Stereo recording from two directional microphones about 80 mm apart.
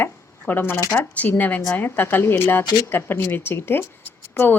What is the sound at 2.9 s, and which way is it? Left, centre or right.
Speech, left.